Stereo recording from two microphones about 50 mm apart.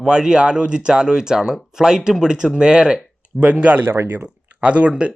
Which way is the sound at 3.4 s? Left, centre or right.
Right.